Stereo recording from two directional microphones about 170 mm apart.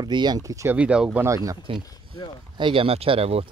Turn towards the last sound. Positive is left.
turn(degrees=-35)  # may be behind; listen again after turning